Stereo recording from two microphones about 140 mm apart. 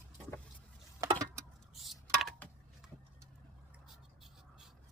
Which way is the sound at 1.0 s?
25° right (ahead or behind).